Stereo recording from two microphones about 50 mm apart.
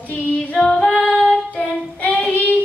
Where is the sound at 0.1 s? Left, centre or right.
Left.